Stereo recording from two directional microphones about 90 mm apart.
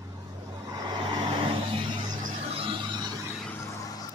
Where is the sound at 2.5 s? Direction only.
75° right (ahead or behind).